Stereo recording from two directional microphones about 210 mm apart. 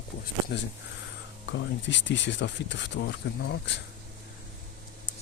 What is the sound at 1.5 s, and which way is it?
Speech, 60° left (ahead or behind).